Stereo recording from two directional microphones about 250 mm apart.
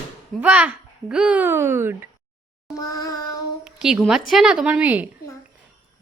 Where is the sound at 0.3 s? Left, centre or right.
Centre.